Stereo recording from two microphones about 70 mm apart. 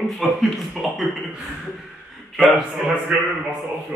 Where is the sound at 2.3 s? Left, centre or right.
Centre.